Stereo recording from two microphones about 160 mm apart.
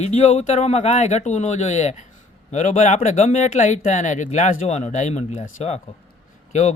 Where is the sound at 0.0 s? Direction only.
45° left (ahead or behind).